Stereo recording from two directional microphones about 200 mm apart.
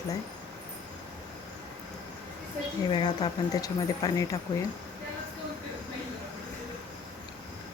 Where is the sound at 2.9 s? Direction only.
25° left (ahead or behind).